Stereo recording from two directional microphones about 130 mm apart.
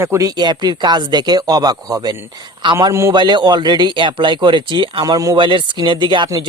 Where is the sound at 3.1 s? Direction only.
35° right (ahead or behind).